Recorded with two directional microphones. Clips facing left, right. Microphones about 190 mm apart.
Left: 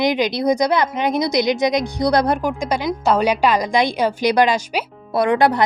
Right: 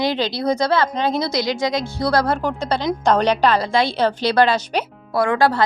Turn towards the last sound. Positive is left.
turn(degrees=20)  # may be behind; listen again after turning